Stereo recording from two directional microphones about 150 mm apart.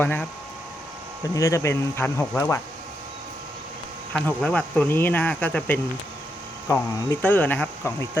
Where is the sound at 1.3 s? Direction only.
20° left (ahead or behind).